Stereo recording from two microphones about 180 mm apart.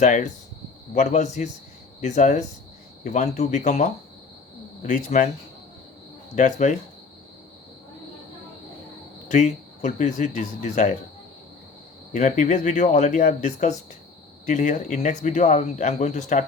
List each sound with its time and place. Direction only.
0.0 s speech: 40° left (ahead or behind)
6.3 s speech: 40° left (ahead or behind)
9.3 s speech: 40° left (ahead or behind)
12.1 s speech: 40° left (ahead or behind)